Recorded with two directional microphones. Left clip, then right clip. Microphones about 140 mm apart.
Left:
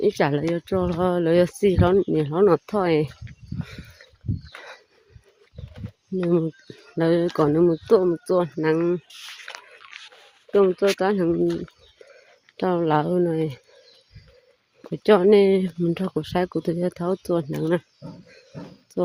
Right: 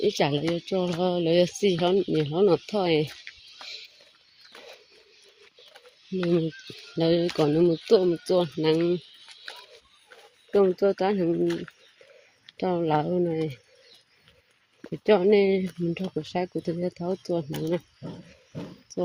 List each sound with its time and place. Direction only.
0.0 s speech: 25° left (ahead or behind)
7.0 s speech: 20° left (ahead or behind)
10.5 s speech: 25° left (ahead or behind)
11.4 s speech: 40° right (ahead or behind)
12.5 s speech: 35° left (ahead or behind)
14.8 s speech: 35° left (ahead or behind)
18.9 s a sound: 40° left (ahead or behind)